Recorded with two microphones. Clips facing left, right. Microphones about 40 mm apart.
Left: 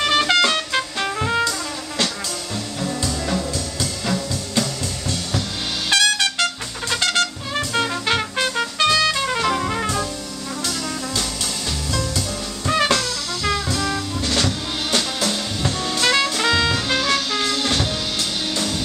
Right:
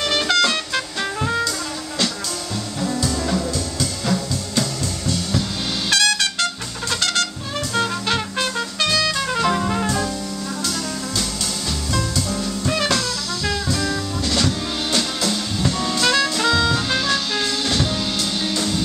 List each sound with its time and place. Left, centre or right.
0.0 s music: centre
3.0 s music: centre
5.9 s trumpet: left
6.9 s music: left
12.2 s music: left; by 18.8 s centre